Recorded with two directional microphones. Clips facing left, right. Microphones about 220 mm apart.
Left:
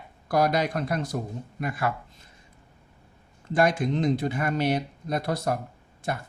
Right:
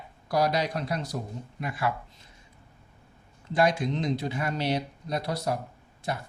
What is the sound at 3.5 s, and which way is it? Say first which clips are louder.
Speech: left 2 dB; 50° left (ahead or behind).